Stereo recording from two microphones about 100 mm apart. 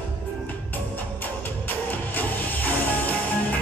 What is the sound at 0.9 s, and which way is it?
Music, 15° left (ahead or behind).